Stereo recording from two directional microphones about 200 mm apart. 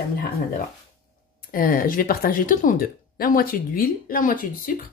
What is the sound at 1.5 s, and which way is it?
Speech, 45° left (ahead or behind).